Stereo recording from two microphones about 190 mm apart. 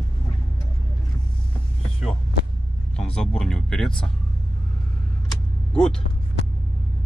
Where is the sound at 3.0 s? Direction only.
5° left (ahead or behind).